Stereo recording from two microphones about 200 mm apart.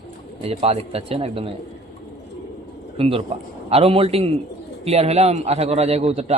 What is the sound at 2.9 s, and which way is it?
A man's voice, 30° right (ahead or behind).